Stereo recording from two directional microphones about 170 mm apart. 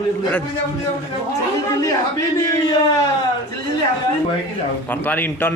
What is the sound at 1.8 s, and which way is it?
Speech, 20° left (ahead or behind).